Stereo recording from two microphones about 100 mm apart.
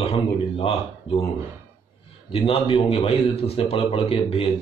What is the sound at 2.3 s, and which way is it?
A man's voice, 75° left (ahead or behind).